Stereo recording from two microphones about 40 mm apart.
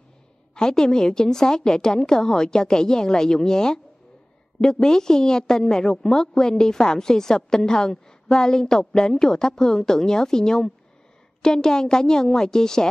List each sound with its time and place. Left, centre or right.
0.6 s a woman's voice: centre